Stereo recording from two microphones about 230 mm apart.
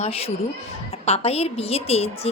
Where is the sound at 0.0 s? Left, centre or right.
Left.